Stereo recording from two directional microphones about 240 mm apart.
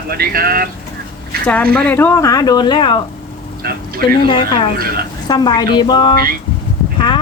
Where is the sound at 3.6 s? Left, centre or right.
Right.